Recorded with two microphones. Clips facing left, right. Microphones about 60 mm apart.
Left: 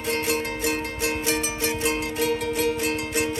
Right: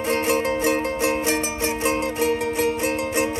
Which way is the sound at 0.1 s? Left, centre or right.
Right.